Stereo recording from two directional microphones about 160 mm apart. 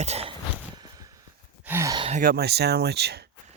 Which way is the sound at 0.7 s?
25° right (ahead or behind).